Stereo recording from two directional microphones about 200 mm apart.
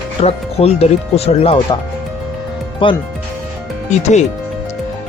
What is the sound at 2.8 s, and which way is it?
Speech, 25° left (ahead or behind).